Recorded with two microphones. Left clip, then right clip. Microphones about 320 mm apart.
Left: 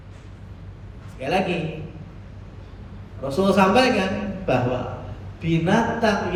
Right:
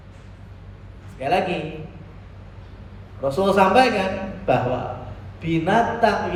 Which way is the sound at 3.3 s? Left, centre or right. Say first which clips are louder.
Right 2 dB; right.